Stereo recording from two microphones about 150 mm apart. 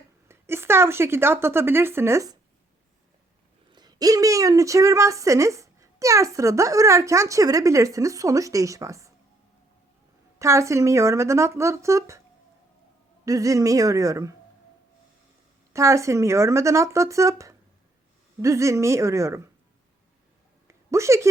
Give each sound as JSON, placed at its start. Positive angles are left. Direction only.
{"t": 0.3, "sound": "speech", "side_deg": -15}
{"t": 3.7, "sound": "a woman's voice", "side_deg": -30}
{"t": 10.3, "sound": "a woman's voice", "side_deg": -20}
{"t": 13.2, "sound": "a woman's voice", "side_deg": -20}
{"t": 15.7, "sound": "a woman's voice", "side_deg": -20}
{"t": 20.7, "sound": "a sound", "side_deg": -20}